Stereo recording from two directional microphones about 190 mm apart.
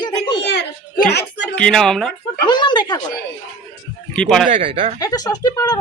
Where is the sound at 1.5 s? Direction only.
5° left (ahead or behind).